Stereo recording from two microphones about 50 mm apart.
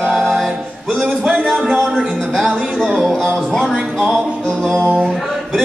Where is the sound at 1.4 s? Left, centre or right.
Centre.